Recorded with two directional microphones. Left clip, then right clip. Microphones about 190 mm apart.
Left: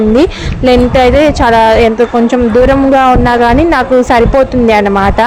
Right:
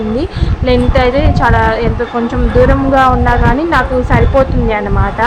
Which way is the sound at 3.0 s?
35° left (ahead or behind).